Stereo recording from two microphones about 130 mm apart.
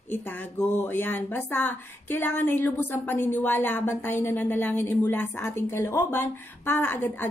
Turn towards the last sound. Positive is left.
turn(degrees=15)  # may be behind; listen again after turning